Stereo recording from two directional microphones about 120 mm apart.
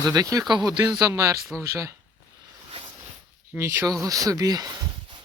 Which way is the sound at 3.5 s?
20° right (ahead or behind).